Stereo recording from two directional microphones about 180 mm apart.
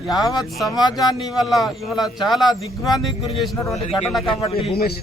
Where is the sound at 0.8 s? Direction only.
25° left (ahead or behind).